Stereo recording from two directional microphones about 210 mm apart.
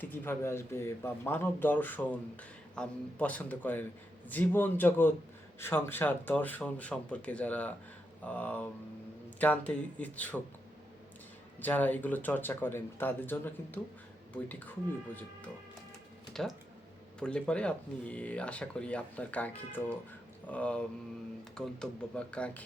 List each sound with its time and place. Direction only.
0.0 s speech: 10° left (ahead or behind)
11.6 s speech: 10° left (ahead or behind)
16.3 s speech: centre (ahead or behind)